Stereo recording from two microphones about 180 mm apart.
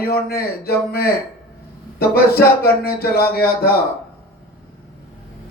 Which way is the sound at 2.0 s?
60° left (ahead or behind).